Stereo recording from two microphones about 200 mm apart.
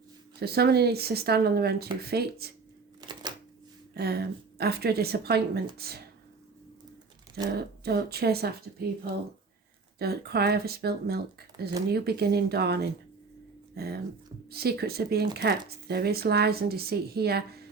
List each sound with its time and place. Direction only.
0.3 s speech: 50° right (ahead or behind)
3.9 s speech: 50° right (ahead or behind)
7.5 s speech: 55° right (ahead or behind)
10.0 s speech: 50° right (ahead or behind)